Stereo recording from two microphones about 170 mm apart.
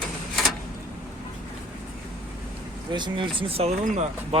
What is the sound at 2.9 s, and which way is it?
Speech, 25° right (ahead or behind).